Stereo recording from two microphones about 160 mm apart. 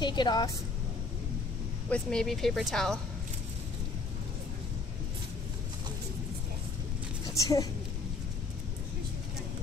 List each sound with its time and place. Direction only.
0.0 s a woman's voice: 30° left (ahead or behind)
1.9 s speech: 5° left (ahead or behind)
7.3 s a woman's voice: 20° left (ahead or behind)